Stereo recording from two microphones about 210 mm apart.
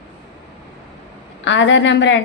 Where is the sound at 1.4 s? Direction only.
60° left (ahead or behind).